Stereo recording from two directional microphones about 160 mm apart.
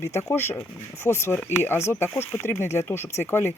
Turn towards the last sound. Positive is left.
turn(degrees=15)  # may be behind; listen again after turning